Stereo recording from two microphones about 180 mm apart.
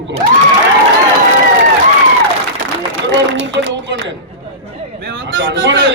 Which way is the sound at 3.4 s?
90° right.